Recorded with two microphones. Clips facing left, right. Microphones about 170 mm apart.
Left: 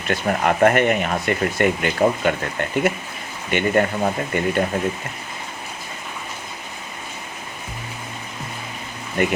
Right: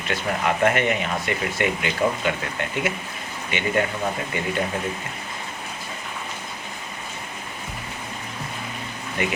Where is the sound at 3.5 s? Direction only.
50° left (ahead or behind).